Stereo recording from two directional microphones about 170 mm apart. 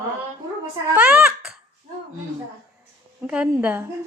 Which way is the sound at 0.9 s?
5° right (ahead or behind).